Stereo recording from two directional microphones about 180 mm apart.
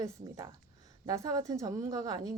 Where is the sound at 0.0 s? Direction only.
20° right (ahead or behind).